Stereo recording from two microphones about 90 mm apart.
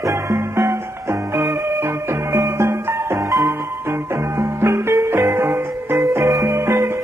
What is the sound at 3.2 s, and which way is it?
Music, 40° right (ahead or behind).